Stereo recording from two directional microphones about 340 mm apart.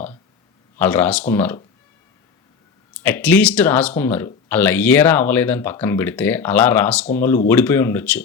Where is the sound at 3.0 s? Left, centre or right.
Centre.